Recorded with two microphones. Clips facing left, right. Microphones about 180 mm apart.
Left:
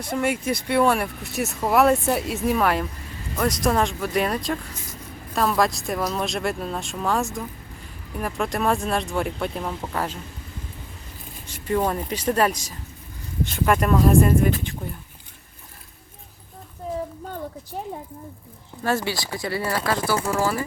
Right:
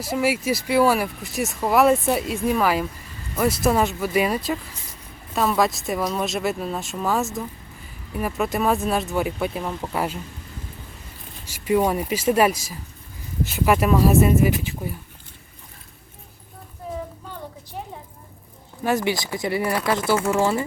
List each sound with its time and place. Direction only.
0.0 s speech: 5° right (ahead or behind)
11.6 s speech: 10° right (ahead or behind)
18.8 s speech: 15° right (ahead or behind)